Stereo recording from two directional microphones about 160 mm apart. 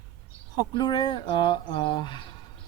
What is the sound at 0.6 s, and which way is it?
Speech, 25° left (ahead or behind).